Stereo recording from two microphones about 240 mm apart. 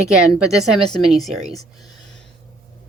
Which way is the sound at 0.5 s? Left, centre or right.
Centre.